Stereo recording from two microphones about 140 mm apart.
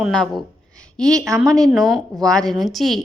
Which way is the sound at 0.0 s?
5° left (ahead or behind).